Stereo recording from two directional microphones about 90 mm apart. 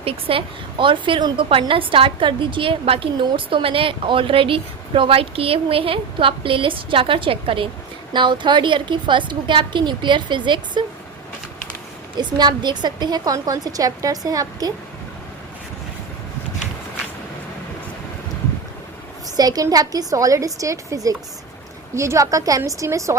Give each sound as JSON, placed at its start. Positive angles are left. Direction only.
{"t": 0.0, "sound": "a woman's voice", "side_deg": -90}
{"t": 8.1, "sound": "a woman's voice", "side_deg": -60}
{"t": 12.1, "sound": "a woman's voice", "side_deg": -55}
{"t": 19.4, "sound": "a woman's voice", "side_deg": -45}